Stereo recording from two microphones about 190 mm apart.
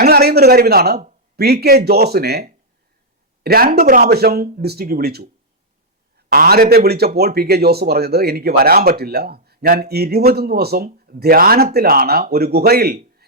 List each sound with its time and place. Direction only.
0.0 s a man's voice: 55° right (ahead or behind)